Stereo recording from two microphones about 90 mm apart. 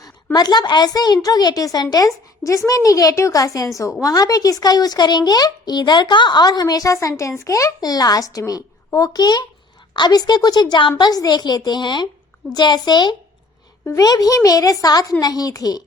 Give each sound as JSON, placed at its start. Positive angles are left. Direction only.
{"t": 0.3, "sound": "a woman's voice", "side_deg": 50}